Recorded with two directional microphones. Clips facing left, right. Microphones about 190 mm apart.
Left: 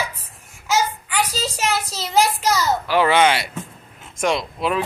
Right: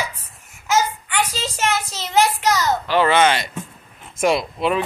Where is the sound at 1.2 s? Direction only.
35° left (ahead or behind).